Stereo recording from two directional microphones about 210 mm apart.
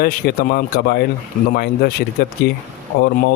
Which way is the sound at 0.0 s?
45° left (ahead or behind).